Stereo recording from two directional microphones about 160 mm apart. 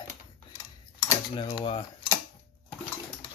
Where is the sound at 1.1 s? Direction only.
25° left (ahead or behind).